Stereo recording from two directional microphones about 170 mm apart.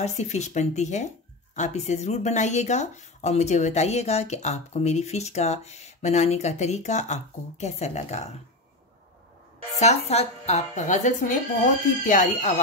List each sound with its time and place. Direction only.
0.0 s speech: 40° left (ahead or behind)
9.8 s speech: 40° left (ahead or behind)